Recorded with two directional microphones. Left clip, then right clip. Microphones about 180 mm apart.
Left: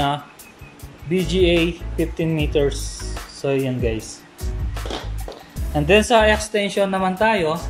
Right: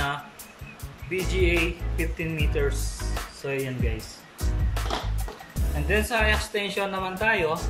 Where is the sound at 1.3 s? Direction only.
30° left (ahead or behind).